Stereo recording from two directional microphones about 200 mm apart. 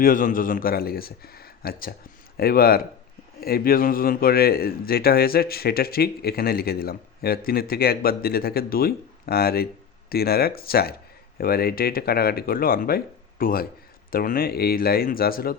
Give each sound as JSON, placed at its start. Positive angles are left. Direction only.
{"t": 0.0, "sound": "speech", "side_deg": 40}